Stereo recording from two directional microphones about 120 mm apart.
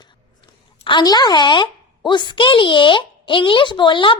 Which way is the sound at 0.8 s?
40° left (ahead or behind).